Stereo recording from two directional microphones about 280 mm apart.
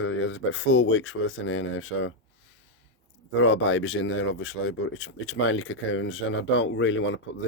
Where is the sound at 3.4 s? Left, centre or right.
Left.